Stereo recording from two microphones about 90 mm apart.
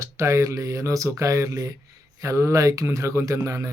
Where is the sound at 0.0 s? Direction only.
35° right (ahead or behind).